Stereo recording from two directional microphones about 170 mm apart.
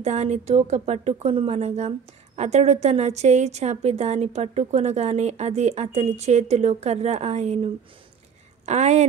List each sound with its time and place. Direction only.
0.0 s speech: 40° right (ahead or behind)